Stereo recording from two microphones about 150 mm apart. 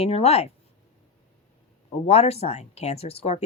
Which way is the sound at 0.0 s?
40° left (ahead or behind).